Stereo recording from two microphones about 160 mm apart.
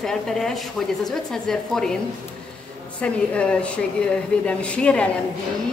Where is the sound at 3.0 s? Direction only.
5° left (ahead or behind).